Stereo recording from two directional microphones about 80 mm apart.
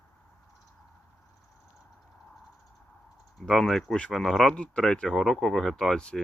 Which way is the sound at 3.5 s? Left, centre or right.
Centre.